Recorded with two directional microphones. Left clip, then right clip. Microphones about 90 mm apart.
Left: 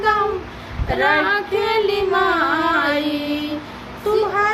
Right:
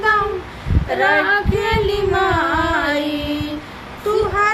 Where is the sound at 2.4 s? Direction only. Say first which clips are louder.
Right 1 dB; 30° right (ahead or behind).